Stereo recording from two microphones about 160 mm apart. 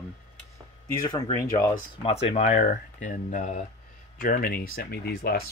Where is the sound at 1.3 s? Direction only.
25° left (ahead or behind).